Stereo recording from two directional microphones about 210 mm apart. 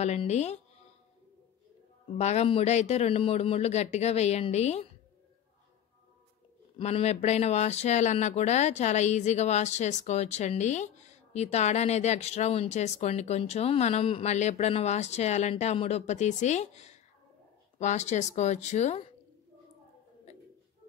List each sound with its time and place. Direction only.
0.0 s speech: 30° left (ahead or behind)
2.1 s speech: 30° left (ahead or behind)
6.8 s speech: 30° left (ahead or behind)